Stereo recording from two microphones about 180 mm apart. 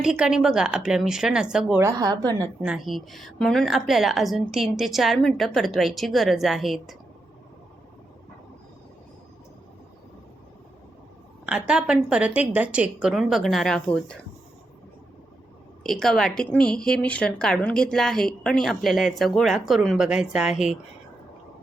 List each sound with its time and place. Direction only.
0.0 s a woman's voice: 5° right (ahead or behind)
1.8 s a woman's voice: 20° right (ahead or behind)
2.6 s a woman's voice: 5° right (ahead or behind)
11.4 s a woman's voice: 5° right (ahead or behind)
15.8 s a woman's voice: centre (ahead or behind)